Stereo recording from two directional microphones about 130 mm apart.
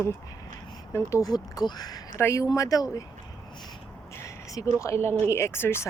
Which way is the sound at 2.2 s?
20° left (ahead or behind).